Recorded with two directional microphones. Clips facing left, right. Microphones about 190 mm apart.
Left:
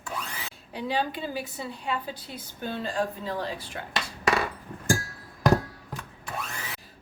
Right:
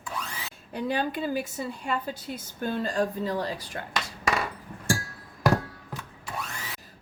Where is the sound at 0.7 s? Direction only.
50° right (ahead or behind).